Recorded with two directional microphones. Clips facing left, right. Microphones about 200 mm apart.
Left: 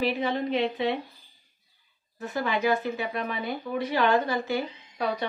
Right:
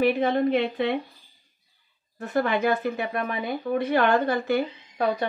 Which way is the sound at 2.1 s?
55° right (ahead or behind).